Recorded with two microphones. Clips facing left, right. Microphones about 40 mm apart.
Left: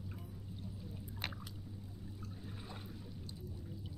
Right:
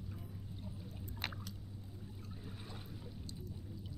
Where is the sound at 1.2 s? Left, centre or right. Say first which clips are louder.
Right 1 dB; centre.